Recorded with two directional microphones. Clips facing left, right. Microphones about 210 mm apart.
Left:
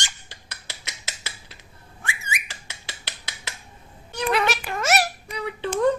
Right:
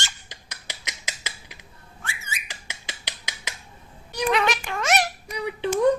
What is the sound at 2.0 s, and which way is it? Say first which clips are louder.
Whistling: left 4 dB; 15° left (ahead or behind).